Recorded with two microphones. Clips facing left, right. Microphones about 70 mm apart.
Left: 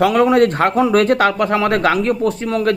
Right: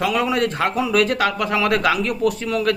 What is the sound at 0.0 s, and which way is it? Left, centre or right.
Speech, left.